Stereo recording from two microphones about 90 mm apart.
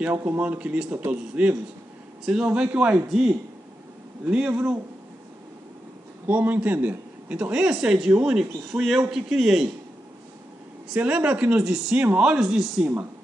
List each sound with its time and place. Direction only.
0.0 s speech: 20° right (ahead or behind)
6.2 s speech: 20° right (ahead or behind)
10.9 s speech: 15° right (ahead or behind)
12.4 s speech: 5° right (ahead or behind)